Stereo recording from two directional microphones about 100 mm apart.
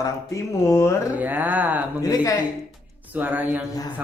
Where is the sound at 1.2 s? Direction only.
15° right (ahead or behind).